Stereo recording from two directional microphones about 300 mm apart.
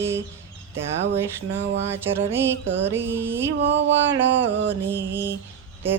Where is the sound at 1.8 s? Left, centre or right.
Centre.